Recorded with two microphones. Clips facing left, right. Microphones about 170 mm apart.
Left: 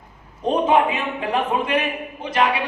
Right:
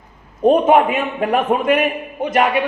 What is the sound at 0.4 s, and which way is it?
A man's voice, 50° right (ahead or behind).